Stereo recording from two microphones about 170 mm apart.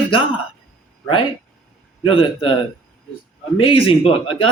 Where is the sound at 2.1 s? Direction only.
30° left (ahead or behind).